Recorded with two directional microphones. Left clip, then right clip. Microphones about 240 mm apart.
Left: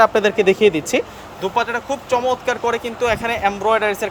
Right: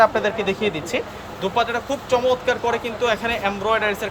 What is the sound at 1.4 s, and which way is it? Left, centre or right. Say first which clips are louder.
Speech: left 2 dB; centre.